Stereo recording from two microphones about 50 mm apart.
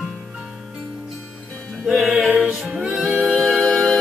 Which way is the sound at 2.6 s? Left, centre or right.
Centre.